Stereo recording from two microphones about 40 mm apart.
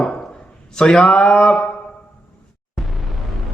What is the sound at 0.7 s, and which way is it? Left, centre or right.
Speech, centre.